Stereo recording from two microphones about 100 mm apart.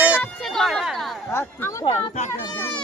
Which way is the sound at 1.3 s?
25° left (ahead or behind).